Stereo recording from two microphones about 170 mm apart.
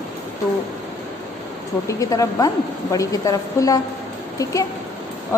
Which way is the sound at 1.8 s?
20° left (ahead or behind).